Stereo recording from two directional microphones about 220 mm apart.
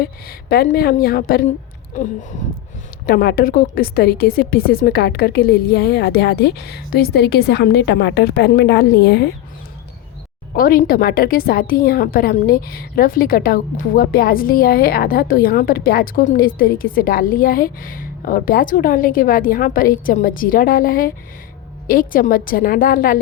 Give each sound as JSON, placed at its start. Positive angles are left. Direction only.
{"t": 0.0, "sound": "a woman's voice", "side_deg": 45}
{"t": 10.5, "sound": "a woman's voice", "side_deg": 40}